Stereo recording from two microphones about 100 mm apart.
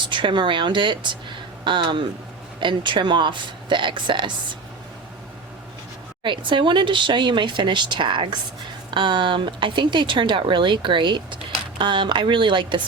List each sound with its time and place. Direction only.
0.1 s speech: 55° right (ahead or behind)
6.2 s speech: 55° right (ahead or behind)